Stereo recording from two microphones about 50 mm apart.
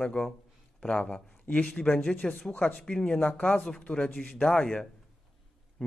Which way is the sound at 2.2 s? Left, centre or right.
Left.